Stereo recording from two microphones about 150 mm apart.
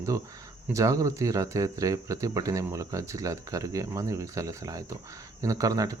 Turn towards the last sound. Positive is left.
turn(degrees=-25)  # may be behind; listen again after turning